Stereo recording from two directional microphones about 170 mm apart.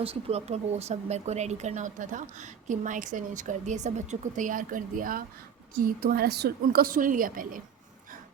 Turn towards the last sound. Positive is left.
turn(degrees=-55)  # may be behind; listen again after turning